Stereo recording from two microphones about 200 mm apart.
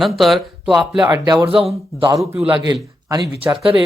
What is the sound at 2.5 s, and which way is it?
A man's voice, 20° right (ahead or behind).